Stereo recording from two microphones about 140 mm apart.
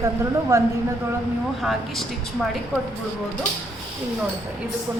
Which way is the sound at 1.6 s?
Centre (ahead or behind).